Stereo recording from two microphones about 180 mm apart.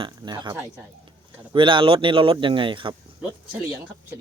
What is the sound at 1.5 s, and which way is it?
A man's voice, 30° right (ahead or behind).